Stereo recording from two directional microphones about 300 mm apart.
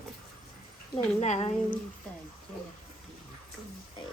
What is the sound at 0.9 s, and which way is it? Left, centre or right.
Speech, left.